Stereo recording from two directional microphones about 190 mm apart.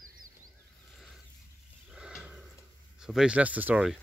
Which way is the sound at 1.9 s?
5° right (ahead or behind).